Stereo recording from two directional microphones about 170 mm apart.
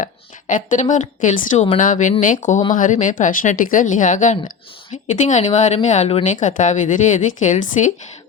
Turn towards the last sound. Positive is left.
turn(degrees=50)  # may be behind; listen again after turning